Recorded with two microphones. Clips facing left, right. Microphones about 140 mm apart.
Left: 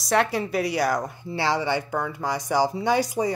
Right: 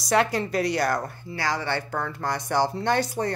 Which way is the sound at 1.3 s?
25° left (ahead or behind).